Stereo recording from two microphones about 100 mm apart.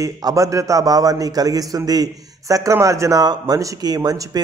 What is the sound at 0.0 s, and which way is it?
A man's voice, 35° right (ahead or behind).